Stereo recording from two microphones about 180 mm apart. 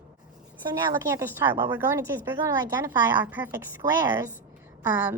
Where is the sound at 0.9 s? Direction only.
15° right (ahead or behind).